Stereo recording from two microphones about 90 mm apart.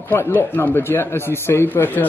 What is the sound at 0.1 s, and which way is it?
Speech, 30° left (ahead or behind).